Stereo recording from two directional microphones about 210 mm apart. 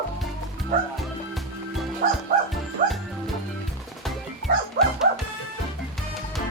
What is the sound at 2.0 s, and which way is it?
Music, 40° right (ahead or behind).